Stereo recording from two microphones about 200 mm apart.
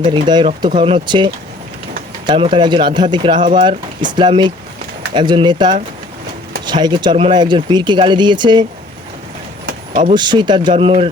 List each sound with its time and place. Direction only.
0.0 s speech: 25° right (ahead or behind)
10.2 s speech: 20° right (ahead or behind)